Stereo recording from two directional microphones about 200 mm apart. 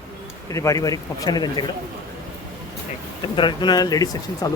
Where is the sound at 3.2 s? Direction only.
25° left (ahead or behind).